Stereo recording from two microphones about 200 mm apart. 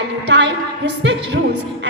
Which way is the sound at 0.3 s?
60° right (ahead or behind).